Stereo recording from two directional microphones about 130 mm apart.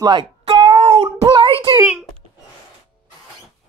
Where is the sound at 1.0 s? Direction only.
35° right (ahead or behind).